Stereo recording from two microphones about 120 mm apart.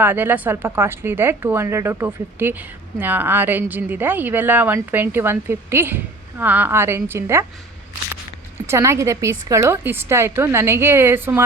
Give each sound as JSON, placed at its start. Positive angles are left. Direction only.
{"t": 0.0, "sound": "a woman's voice", "side_deg": -15}
{"t": 8.6, "sound": "a woman's voice", "side_deg": -20}